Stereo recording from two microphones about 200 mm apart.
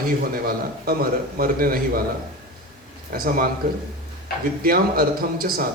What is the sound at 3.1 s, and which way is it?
Speech, 45° right (ahead or behind).